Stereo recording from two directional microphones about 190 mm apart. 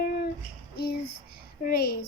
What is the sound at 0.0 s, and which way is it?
Child singing, 50° left (ahead or behind).